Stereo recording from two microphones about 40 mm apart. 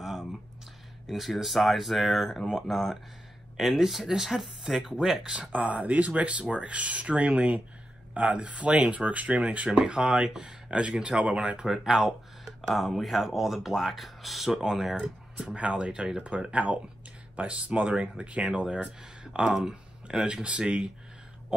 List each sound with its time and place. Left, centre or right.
1.0 s speech: centre
5.2 s speech: right
5.5 s speech: right
11.7 s speech: centre
12.4 s speech: centre
15.0 s speech: right
16.5 s speech: right; by 20.4 s centre
20.4 s speech: right